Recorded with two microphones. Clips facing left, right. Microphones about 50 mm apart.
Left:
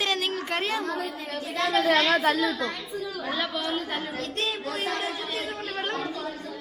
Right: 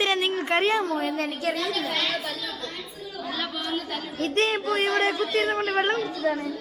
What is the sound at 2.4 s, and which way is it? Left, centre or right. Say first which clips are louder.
Speech: left 8 dB; left.